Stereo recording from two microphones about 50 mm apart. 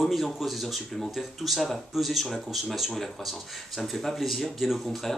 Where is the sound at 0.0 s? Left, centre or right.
Centre.